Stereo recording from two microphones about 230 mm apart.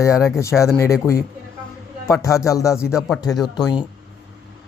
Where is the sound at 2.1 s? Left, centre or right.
Centre.